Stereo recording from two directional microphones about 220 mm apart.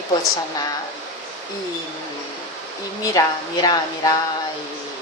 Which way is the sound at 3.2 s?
15° left (ahead or behind).